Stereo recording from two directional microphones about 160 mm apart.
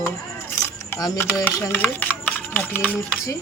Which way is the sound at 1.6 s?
15° left (ahead or behind).